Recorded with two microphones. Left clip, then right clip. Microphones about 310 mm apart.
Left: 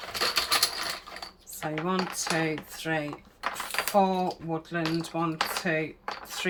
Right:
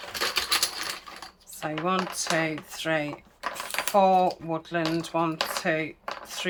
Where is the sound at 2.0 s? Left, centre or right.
Centre.